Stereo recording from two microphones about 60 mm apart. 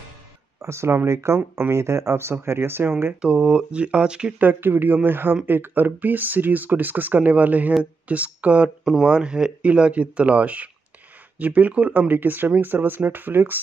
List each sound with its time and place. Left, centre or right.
0.6 s speech: right
3.2 s speech: centre
4.4 s speech: right